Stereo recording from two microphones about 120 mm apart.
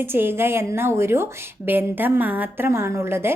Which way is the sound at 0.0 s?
20° right (ahead or behind).